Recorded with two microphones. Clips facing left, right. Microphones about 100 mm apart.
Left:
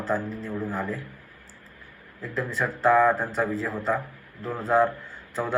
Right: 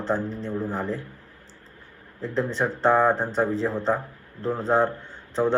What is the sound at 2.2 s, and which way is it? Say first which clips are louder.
Speech: right 3 dB; 30° right (ahead or behind).